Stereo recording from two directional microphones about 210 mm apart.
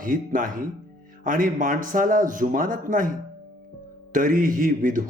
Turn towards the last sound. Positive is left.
turn(degrees=-40)  # may be behind; listen again after turning